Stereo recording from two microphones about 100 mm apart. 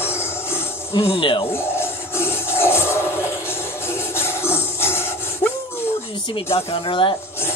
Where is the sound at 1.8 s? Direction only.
25° left (ahead or behind).